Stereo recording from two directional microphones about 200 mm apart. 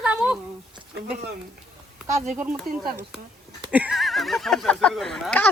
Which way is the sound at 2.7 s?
50° right (ahead or behind).